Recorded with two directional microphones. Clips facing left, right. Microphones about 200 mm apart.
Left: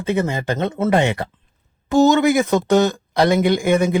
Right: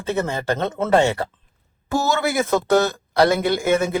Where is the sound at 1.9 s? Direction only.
20° left (ahead or behind).